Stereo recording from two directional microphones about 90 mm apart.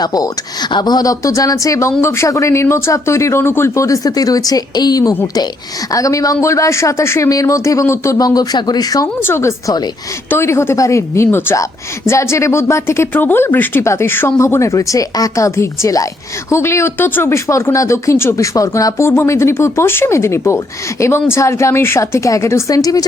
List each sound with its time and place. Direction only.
0.0 s speech: 45° left (ahead or behind)
9.2 s speech: 30° left (ahead or behind)